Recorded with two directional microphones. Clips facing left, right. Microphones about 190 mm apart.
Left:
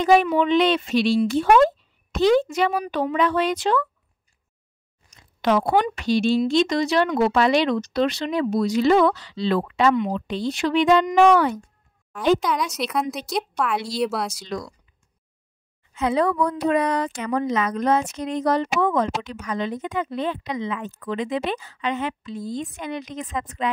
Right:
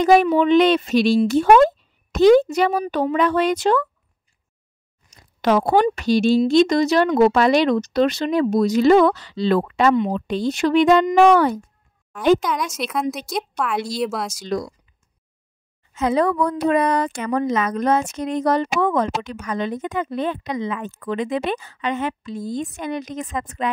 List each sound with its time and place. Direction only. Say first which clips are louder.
0.0 s speech: right 3 dB; 45° right (ahead or behind)
5.1 s a sound: right 2 dB; 45° right (ahead or behind)
5.9 s speech: right 4 dB; 40° right (ahead or behind)
12.7 s a woman's voice: right 1 dB; centre (ahead or behind)
15.9 s a woman's voice: right 2 dB; 45° right (ahead or behind)